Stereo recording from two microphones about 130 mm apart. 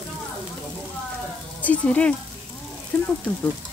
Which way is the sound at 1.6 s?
10° left (ahead or behind).